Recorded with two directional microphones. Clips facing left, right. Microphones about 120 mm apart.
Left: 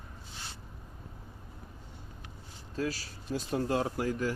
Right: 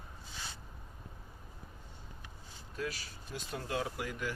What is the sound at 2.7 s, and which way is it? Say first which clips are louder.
Speech: left 6 dB; 35° left (ahead or behind).